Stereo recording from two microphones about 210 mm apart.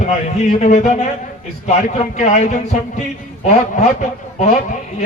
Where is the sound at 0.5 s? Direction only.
35° left (ahead or behind).